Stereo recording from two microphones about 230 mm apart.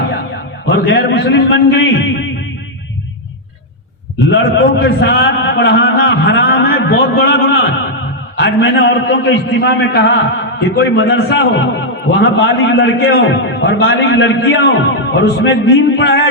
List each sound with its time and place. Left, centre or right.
0.6 s a man's voice: left
4.3 s a man's voice: left